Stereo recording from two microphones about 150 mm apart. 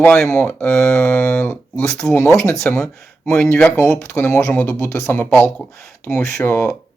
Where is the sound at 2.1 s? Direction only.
20° left (ahead or behind); by 6.1 s centre (ahead or behind).